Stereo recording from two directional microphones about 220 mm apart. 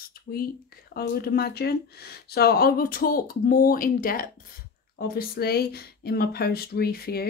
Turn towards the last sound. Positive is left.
turn(degrees=45)  # may be behind; listen again after turning